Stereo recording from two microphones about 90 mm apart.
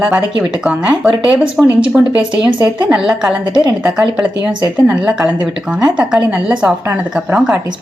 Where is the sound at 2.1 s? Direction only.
60° right (ahead or behind).